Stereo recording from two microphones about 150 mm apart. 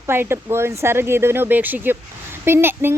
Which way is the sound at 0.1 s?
15° right (ahead or behind).